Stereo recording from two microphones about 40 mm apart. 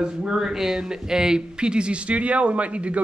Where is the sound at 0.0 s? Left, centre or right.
Centre.